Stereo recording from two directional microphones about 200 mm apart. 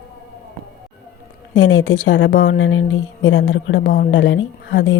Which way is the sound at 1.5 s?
70° left (ahead or behind).